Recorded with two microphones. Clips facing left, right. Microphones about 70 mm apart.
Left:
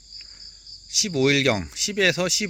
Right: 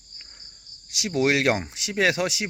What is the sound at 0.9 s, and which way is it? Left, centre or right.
Speech, right.